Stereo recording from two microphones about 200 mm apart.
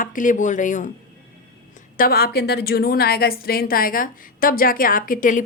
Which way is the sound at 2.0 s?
50° left (ahead or behind).